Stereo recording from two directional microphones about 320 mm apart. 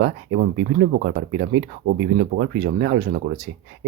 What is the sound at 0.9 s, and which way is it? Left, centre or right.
Speech, right.